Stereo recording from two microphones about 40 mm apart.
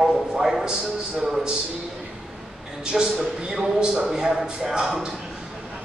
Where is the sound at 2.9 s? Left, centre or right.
Centre.